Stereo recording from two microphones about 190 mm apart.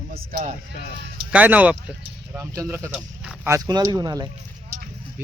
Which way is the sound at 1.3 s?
10° right (ahead or behind).